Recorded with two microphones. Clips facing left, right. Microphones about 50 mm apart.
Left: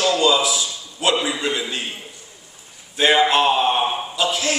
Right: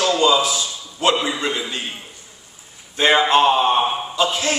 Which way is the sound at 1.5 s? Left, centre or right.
Centre.